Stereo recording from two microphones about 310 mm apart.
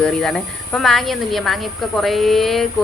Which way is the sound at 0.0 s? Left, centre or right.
Centre.